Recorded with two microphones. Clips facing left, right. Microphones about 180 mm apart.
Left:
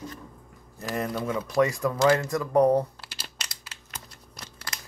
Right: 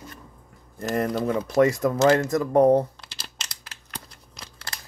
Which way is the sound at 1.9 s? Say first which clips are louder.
Right 2 dB; 25° right (ahead or behind).